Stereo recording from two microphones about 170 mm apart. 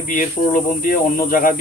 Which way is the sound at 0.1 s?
50° left (ahead or behind).